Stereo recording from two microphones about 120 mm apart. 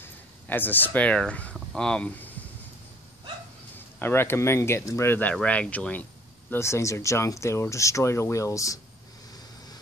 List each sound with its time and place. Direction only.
0.0 s speech: 15° left (ahead or behind)
3.7 s speech: 20° left (ahead or behind)
6.5 s speech: 25° left (ahead or behind)